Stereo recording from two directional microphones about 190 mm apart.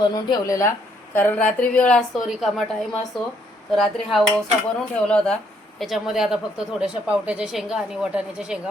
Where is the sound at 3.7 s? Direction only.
Centre (ahead or behind).